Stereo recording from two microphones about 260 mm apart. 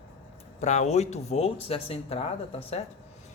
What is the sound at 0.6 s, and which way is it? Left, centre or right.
Speech, left.